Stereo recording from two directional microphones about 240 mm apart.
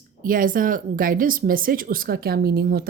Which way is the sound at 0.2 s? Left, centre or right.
Right.